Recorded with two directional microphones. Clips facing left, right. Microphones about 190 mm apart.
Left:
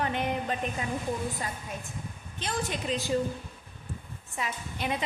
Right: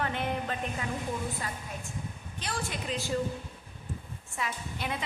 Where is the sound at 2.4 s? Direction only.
20° left (ahead or behind).